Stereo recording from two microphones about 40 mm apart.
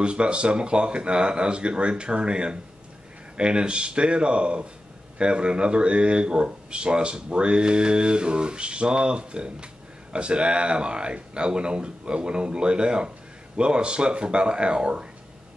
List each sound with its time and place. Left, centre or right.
0.0 s speech: right